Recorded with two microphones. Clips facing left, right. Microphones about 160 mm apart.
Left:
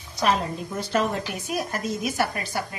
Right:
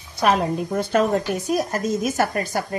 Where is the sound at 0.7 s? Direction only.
55° right (ahead or behind).